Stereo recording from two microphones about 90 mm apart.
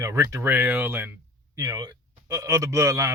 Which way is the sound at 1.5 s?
40° right (ahead or behind).